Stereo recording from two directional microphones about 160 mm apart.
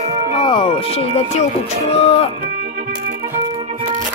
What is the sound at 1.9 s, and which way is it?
Speech, 40° left (ahead or behind).